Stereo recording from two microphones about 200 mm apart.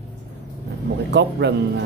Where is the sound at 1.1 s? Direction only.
60° right (ahead or behind).